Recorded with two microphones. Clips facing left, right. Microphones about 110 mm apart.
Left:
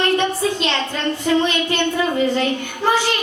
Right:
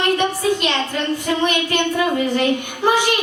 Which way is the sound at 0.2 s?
15° right (ahead or behind).